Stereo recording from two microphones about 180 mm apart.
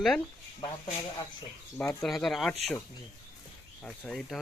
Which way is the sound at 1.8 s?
15° left (ahead or behind).